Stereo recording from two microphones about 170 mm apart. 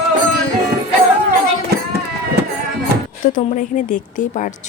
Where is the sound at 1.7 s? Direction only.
70° right (ahead or behind).